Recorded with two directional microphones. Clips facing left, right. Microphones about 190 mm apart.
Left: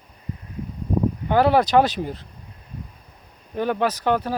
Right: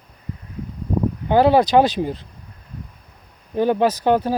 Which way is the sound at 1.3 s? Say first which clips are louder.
Right 3 dB; 25° right (ahead or behind).